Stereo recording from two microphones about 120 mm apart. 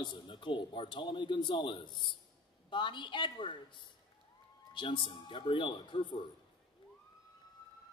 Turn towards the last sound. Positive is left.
turn(degrees=40)  # may be behind; listen again after turning